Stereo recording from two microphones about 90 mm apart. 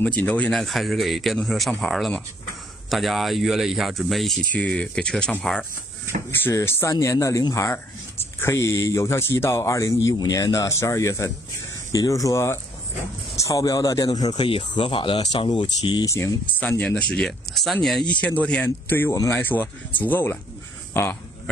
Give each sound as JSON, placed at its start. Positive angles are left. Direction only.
{"t": 0.0, "sound": "speech", "side_deg": 15}
{"t": 0.5, "sound": "speech", "side_deg": 0}
{"t": 4.5, "sound": "speech", "side_deg": 15}
{"t": 6.5, "sound": "speech", "side_deg": 35}
{"t": 14.4, "sound": "speech", "side_deg": 70}
{"t": 16.1, "sound": "speech", "side_deg": 35}
{"t": 16.5, "sound": "speech", "side_deg": 15}
{"t": 18.2, "sound": "a man's voice", "side_deg": 15}